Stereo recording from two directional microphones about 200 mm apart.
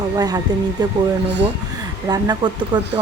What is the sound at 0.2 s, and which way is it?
Speech, 20° right (ahead or behind).